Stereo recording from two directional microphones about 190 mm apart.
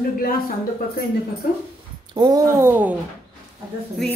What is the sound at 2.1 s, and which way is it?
Speech, 20° right (ahead or behind).